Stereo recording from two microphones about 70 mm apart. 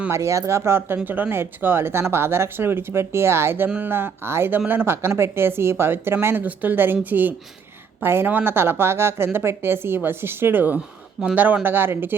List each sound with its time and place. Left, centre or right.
0.1 s a woman's voice: right